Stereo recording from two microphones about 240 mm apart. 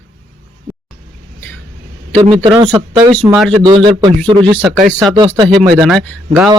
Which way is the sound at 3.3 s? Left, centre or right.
Centre.